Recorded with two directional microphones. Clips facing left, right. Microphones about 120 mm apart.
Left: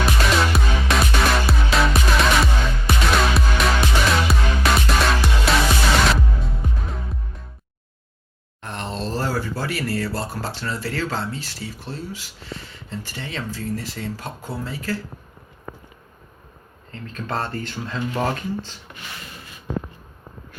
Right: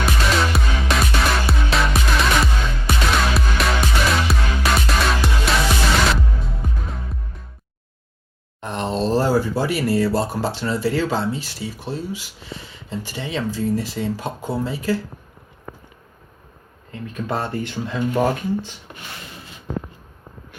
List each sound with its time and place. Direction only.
0.0 s music: centre (ahead or behind)
6.9 s music: centre (ahead or behind)
8.6 s speech: 20° right (ahead or behind)
16.9 s speech: 15° right (ahead or behind)